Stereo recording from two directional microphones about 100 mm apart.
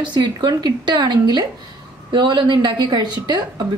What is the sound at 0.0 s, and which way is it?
A woman's voice, 50° right (ahead or behind).